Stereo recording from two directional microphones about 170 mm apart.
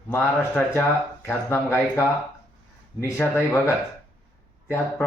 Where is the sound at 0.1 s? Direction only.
10° left (ahead or behind).